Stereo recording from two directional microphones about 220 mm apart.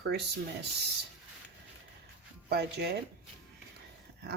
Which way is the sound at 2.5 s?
45° right (ahead or behind).